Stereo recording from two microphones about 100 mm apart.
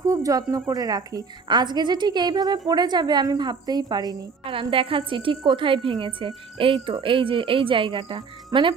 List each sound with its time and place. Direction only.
0.0 s a woman's voice: 35° right (ahead or behind)
4.7 s a woman's voice: 65° right (ahead or behind)